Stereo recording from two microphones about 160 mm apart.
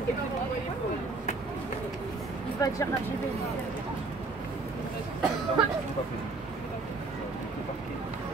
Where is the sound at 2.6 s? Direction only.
20° left (ahead or behind).